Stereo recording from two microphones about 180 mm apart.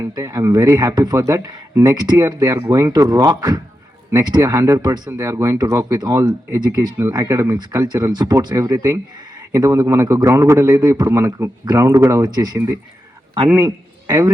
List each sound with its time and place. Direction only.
0.0 s a man's voice: 20° right (ahead or behind)